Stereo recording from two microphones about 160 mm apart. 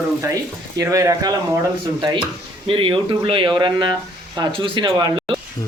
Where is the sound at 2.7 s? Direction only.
35° right (ahead or behind).